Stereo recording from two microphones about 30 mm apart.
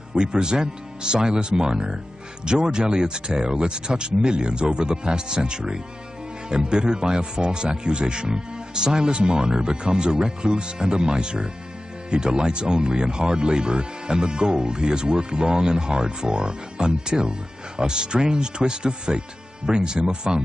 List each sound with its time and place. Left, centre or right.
0.1 s speech: right